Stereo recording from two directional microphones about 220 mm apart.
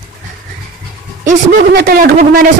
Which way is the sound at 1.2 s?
45° right (ahead or behind).